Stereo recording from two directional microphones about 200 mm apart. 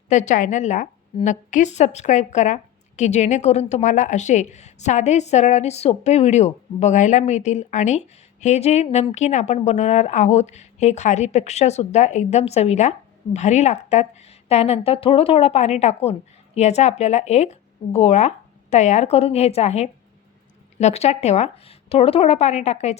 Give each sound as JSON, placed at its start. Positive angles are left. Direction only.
{"t": 0.1, "sound": "a woman's voice", "side_deg": 35}